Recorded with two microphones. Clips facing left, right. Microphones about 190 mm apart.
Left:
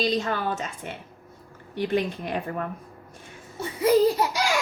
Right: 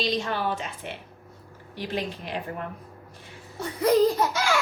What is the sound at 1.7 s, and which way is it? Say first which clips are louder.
Speech: left 6 dB; 55° left (ahead or behind).